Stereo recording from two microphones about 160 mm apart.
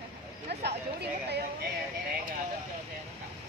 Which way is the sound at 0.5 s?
90° right.